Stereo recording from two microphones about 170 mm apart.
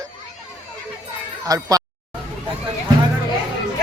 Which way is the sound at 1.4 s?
20° right (ahead or behind).